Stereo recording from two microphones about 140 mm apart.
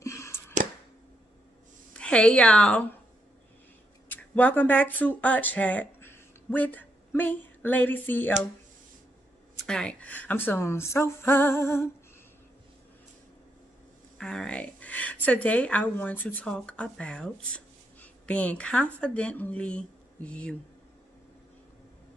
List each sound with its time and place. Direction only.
0.0 s a sound: 20° left (ahead or behind)
2.0 s a woman's voice: 5° left (ahead or behind)
4.1 s speech: 10° left (ahead or behind)
9.7 s speech: 5° left (ahead or behind)
14.1 s a woman's voice: 5° left (ahead or behind)